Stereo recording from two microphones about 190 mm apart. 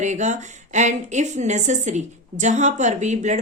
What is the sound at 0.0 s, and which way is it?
A woman's voice, 40° right (ahead or behind).